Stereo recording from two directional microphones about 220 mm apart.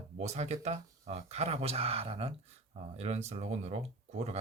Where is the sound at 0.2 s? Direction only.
30° right (ahead or behind).